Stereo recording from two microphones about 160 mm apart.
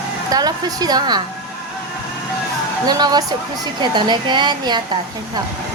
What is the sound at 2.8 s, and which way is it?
Speech, 25° right (ahead or behind).